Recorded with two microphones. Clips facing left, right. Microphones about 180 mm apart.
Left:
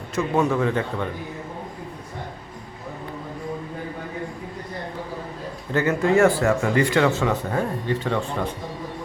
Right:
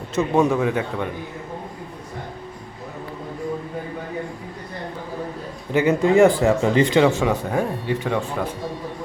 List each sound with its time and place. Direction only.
0.2 s speech: 15° right (ahead or behind)
5.7 s speech: 15° right (ahead or behind)